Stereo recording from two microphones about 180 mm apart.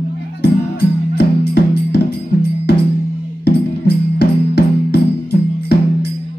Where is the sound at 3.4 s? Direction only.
65° left (ahead or behind).